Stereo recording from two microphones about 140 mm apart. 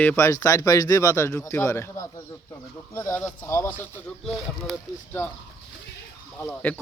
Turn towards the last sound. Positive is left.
turn(degrees=15)  # may be behind; listen again after turning